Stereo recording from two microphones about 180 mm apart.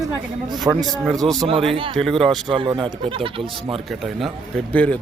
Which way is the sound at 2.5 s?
25° right (ahead or behind).